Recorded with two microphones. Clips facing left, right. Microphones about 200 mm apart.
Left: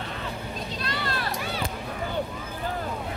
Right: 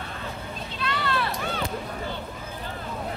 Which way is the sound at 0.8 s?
40° left (ahead or behind).